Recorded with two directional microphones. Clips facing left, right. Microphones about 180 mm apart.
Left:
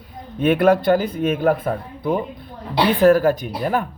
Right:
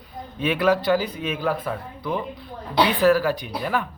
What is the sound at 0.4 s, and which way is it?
Speech, 55° left (ahead or behind).